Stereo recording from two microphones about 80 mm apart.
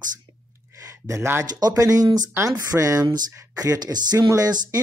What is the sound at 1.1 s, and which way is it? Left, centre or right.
Speech, right.